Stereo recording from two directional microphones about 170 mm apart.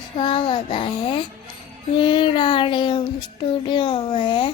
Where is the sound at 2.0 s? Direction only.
30° left (ahead or behind).